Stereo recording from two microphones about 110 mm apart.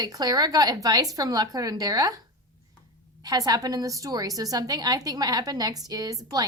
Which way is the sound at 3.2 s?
35° right (ahead or behind).